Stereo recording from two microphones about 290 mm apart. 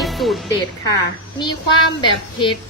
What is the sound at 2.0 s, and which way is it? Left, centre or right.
Speech, centre.